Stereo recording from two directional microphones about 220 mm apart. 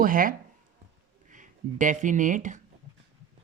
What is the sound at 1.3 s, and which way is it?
Speech, 35° right (ahead or behind).